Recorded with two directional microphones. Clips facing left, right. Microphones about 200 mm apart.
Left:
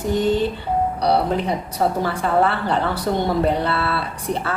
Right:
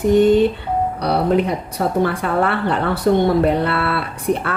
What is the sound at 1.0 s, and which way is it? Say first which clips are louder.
A woman's voice: right 4 dB; 55° right (ahead or behind).